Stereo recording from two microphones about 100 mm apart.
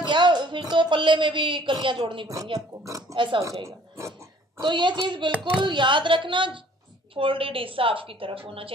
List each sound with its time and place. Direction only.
0.0 s speech: 50° right (ahead or behind)
2.2 s speech: 35° right (ahead or behind)
3.2 s a woman's voice: 55° right (ahead or behind)
3.6 s speech: 30° right (ahead or behind)
4.6 s a woman's voice: 50° right (ahead or behind)